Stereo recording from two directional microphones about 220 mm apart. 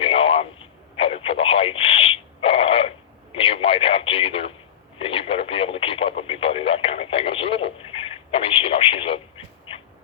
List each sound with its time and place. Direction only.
0.0 s a sound: 25° left (ahead or behind)
0.9 s radio: 25° left (ahead or behind)
9.7 s heart murmur: 25° left (ahead or behind)